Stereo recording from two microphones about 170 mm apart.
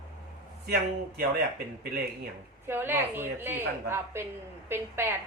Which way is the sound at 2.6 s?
15° right (ahead or behind).